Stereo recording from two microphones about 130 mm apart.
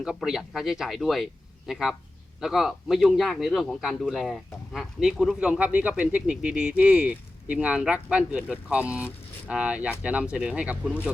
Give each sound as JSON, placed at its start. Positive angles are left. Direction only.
{"t": 0.0, "sound": "a man's voice", "side_deg": -5}